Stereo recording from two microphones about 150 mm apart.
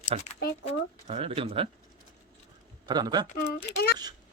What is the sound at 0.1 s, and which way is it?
Speech, 40° right (ahead or behind).